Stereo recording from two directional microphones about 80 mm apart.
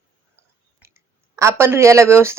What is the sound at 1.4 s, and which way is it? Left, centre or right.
Speech, right.